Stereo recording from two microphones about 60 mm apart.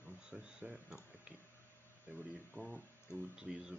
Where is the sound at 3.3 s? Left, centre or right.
Centre.